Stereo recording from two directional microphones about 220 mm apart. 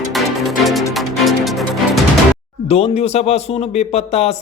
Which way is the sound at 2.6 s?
25° left (ahead or behind).